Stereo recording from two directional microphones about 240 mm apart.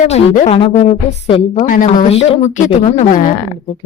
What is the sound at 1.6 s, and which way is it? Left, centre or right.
A woman's voice, left.